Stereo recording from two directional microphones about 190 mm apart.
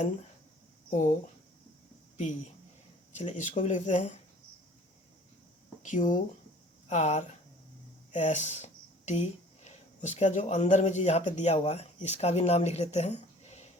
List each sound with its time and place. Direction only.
0.9 s speech: 40° left (ahead or behind)
3.2 s speech: 40° left (ahead or behind)
5.8 s speech: 40° left (ahead or behind)